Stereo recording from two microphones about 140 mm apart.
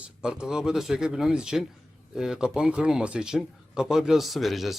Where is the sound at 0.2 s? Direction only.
5° right (ahead or behind).